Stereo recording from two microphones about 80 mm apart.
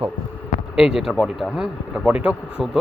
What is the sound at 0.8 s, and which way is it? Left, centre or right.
Speech, centre.